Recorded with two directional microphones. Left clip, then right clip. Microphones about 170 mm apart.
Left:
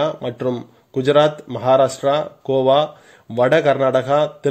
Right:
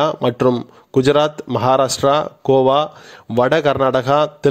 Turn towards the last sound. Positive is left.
turn(degrees=-35)  # may be behind; listen again after turning